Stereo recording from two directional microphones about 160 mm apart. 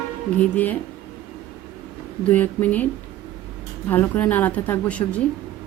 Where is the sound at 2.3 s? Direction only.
10° left (ahead or behind).